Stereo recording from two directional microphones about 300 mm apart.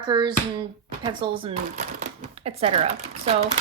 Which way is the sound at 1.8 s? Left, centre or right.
Right.